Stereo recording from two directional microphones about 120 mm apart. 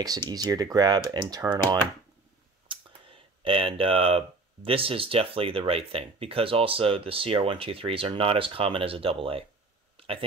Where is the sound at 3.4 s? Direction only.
50° right (ahead or behind).